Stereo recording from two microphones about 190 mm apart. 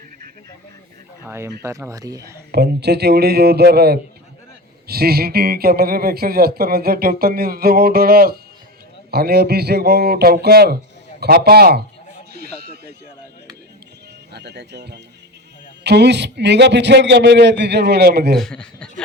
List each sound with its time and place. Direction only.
1.2 s speech: 15° right (ahead or behind)
2.5 s a man's voice: 55° right (ahead or behind)
12.3 s a sound: 55° right (ahead or behind)
14.3 s a man's voice: 60° right (ahead or behind)
18.3 s speech: 5° left (ahead or behind)